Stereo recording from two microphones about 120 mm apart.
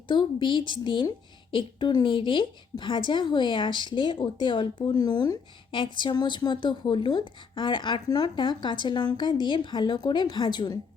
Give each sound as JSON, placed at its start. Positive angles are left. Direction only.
{"t": 0.1, "sound": "a woman's voice", "side_deg": 40}